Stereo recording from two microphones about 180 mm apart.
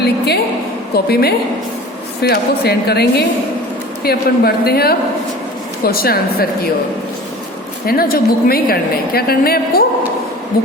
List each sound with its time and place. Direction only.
0.9 s a woman's voice: 60° left (ahead or behind)
7.9 s a woman's voice: 55° left (ahead or behind)